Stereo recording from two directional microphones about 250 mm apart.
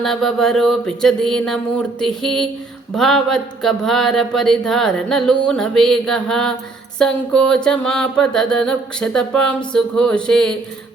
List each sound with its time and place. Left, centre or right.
0.0 s speech: centre